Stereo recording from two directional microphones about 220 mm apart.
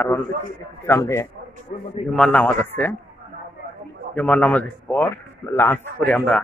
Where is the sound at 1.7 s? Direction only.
35° left (ahead or behind).